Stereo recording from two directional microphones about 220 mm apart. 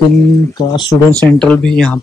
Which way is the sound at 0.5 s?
15° left (ahead or behind).